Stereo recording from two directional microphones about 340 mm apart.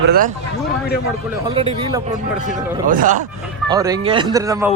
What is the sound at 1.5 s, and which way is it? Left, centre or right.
A man's voice, centre.